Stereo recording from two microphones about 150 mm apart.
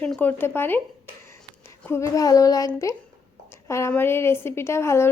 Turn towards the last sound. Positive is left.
turn(degrees=15)  # may be behind; listen again after turning